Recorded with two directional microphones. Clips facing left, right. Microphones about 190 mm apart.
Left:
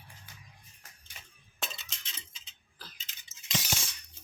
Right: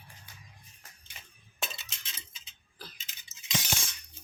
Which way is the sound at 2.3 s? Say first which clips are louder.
Right 4 dB; 10° right (ahead or behind).